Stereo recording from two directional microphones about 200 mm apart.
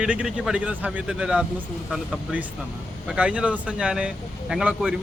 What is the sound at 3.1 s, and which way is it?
A man's voice, 5° right (ahead or behind).